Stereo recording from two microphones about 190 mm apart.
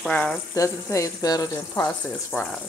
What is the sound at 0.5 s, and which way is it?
Speech, 15° left (ahead or behind).